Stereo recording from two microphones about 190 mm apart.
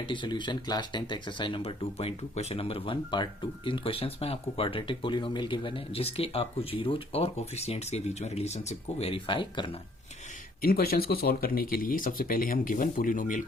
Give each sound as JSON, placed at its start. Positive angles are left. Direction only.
{"t": 0.0, "sound": "speech", "side_deg": 25}
{"t": 10.6, "sound": "speech", "side_deg": 50}